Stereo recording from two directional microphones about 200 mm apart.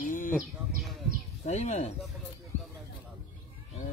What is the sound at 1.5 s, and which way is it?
Speech, 35° left (ahead or behind).